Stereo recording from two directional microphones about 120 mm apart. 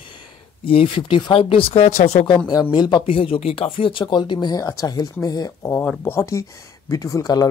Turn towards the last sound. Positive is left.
turn(degrees=30)  # may be behind; listen again after turning